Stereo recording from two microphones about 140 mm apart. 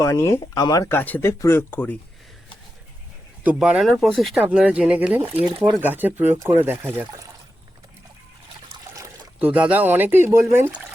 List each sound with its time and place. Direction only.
0.0 s speech: 20° left (ahead or behind)
0.9 s speech: 15° left (ahead or behind)
3.4 s speech: 10° right (ahead or behind)
4.4 s speech: 10° right (ahead or behind)
5.4 s speech: 40° right (ahead or behind)
5.7 s speech: 15° right (ahead or behind)
8.8 s trickle: 20° right (ahead or behind)
9.4 s speech: 10° right (ahead or behind)